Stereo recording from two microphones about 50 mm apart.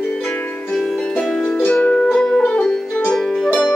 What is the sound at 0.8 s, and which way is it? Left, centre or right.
Harp, centre.